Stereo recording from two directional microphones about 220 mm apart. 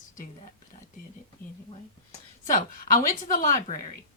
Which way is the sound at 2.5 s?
40° left (ahead or behind).